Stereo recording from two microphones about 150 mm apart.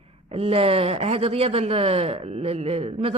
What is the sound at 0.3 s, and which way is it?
Speech, 40° right (ahead or behind).